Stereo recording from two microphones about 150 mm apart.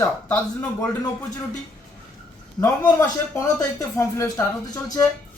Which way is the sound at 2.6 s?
20° left (ahead or behind).